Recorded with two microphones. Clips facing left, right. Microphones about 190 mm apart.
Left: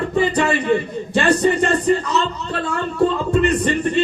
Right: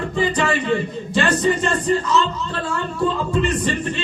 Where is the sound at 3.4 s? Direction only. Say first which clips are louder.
Left 4 dB; 60° left (ahead or behind).